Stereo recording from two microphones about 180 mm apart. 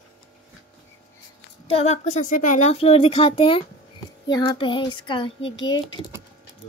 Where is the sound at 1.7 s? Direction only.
35° left (ahead or behind).